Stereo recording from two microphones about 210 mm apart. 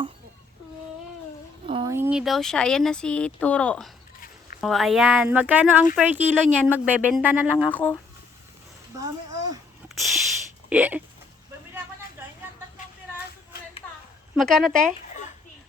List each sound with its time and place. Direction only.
1.6 s a sound: 25° right (ahead or behind)
1.9 s speech: 10° right (ahead or behind)
6.3 s a woman's voice: 5° left (ahead or behind)
6.7 s speech: 5° right (ahead or behind)
9.9 s a sound: centre (ahead or behind)
10.7 s speech: 5° right (ahead or behind)
14.3 s speech: centre (ahead or behind)